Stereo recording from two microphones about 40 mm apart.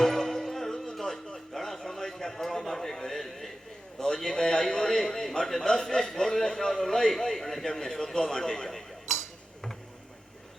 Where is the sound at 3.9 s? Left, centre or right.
Centre.